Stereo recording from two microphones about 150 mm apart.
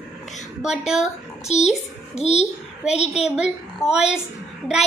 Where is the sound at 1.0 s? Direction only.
50° left (ahead or behind).